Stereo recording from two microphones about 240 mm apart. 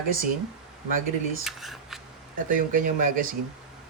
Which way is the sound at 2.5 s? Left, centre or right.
Right.